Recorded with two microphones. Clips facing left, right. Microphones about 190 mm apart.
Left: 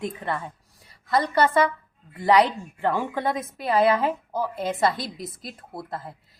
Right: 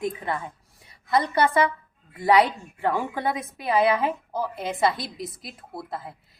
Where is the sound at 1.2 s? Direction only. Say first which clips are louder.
Left 1 dB; 10° right (ahead or behind).